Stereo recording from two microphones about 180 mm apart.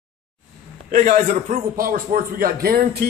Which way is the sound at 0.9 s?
50° right (ahead or behind).